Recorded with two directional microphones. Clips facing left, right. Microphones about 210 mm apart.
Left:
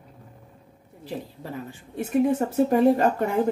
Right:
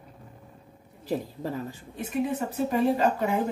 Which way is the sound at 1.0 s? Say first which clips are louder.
Right 4 dB; 40° right (ahead or behind).